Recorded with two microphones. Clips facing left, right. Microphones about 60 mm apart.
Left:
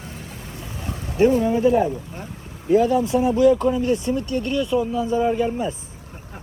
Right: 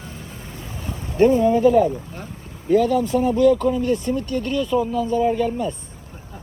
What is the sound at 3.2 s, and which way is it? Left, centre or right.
Speech, centre.